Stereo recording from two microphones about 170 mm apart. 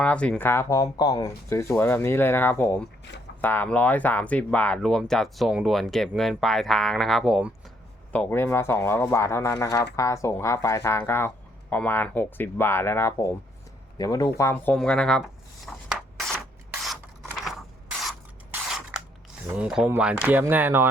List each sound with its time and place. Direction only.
0.0 s speech: 5° left (ahead or behind)
3.1 s speech: 90° left
3.4 s speech: 10° left (ahead or behind)
8.1 s speech: 10° left (ahead or behind)
15.6 s a sound: centre (ahead or behind)
16.8 s mechanisms: centre (ahead or behind)
18.5 s scissors: 10° right (ahead or behind)
19.5 s speech: 5° right (ahead or behind)